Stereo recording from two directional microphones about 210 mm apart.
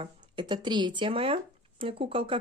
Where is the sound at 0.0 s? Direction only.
20° right (ahead or behind).